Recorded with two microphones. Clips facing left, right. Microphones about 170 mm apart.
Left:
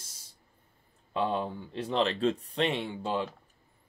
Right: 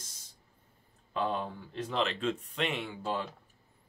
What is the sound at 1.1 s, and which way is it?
Speech, 25° left (ahead or behind).